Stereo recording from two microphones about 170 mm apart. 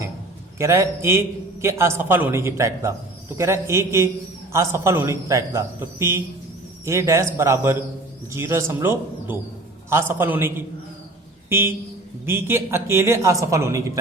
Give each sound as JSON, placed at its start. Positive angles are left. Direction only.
{"t": 0.6, "sound": "a man's voice", "side_deg": -15}